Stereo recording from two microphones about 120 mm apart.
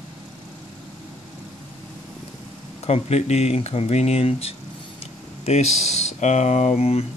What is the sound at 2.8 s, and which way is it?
Speech, 60° left (ahead or behind).